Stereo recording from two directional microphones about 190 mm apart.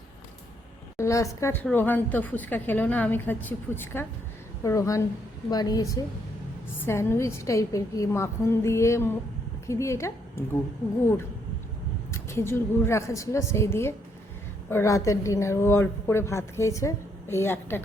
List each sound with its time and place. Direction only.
0.9 s a woman's voice: 15° left (ahead or behind)
12.1 s a woman's voice: 15° left (ahead or behind)